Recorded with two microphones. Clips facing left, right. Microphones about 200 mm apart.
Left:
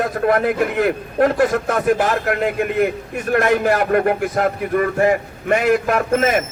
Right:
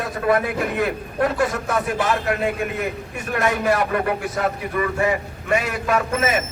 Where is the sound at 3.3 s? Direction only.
50° left (ahead or behind).